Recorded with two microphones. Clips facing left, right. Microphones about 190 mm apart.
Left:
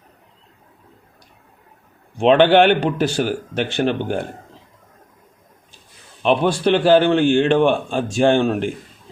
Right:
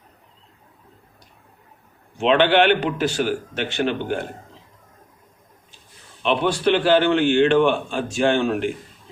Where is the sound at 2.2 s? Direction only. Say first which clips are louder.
Left 4 dB; 45° left (ahead or behind).